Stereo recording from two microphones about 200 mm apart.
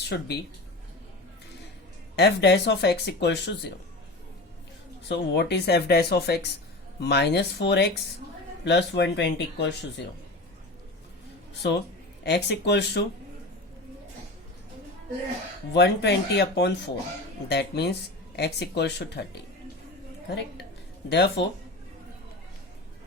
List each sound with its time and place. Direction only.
0.0 s speech: 55° left (ahead or behind)
2.1 s speech: 55° left (ahead or behind)
5.0 s speech: 60° left (ahead or behind)
11.6 s speech: 60° left (ahead or behind)
15.7 s speech: 55° left (ahead or behind)
21.1 s speech: 60° left (ahead or behind)